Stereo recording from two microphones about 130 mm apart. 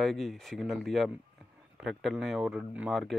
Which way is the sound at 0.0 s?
Centre (ahead or behind).